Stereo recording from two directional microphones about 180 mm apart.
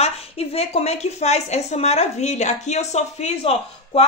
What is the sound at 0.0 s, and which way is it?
A woman's voice, 35° left (ahead or behind).